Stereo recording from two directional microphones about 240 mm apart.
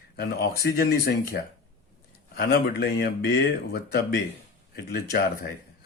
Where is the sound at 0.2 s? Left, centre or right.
Left.